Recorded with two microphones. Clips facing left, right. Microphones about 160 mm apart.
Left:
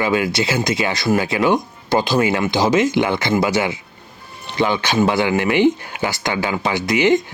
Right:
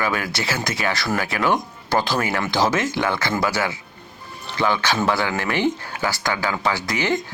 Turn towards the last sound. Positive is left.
turn(degrees=20)  # may be behind; listen again after turning